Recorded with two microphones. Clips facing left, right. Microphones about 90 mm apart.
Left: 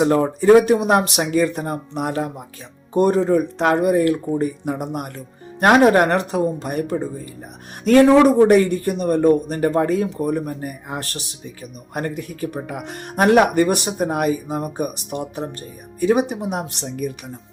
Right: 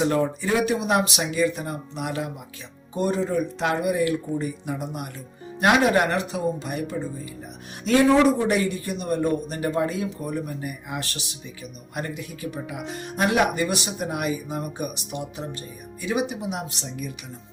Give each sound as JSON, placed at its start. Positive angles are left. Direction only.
{"t": 0.0, "sound": "a man's voice", "side_deg": 40}
{"t": 2.9, "sound": "a man's voice", "side_deg": 55}